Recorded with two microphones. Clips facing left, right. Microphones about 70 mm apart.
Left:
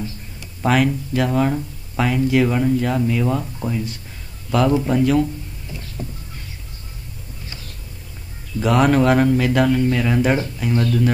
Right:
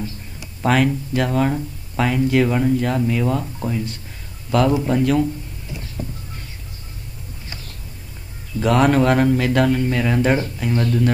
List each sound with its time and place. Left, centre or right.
0.6 s a man's voice: centre
8.5 s speech: centre